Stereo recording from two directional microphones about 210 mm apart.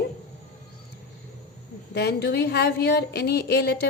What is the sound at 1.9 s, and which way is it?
A woman's voice, 50° left (ahead or behind).